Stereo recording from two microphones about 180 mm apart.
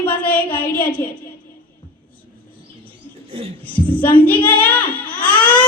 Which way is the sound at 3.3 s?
30° right (ahead or behind).